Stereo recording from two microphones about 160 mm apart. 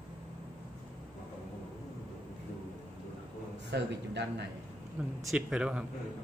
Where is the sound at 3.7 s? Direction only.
90° right.